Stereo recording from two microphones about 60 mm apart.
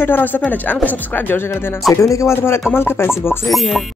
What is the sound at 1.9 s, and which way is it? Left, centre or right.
Speech, left.